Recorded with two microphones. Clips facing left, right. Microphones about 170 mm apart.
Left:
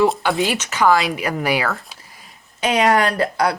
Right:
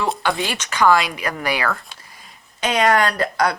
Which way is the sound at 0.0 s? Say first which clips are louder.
Left 5 dB; 5° left (ahead or behind).